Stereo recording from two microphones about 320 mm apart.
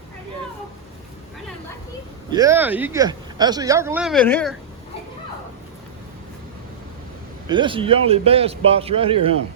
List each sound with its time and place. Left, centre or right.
2.3 s speech: centre
7.4 s speech: centre